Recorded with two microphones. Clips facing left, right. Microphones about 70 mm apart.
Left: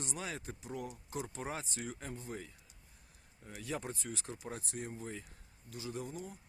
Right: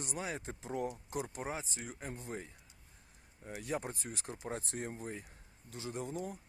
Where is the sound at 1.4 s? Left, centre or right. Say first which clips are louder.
Even; centre.